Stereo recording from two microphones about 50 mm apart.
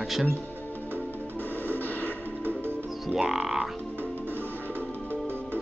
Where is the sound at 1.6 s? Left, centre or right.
Left.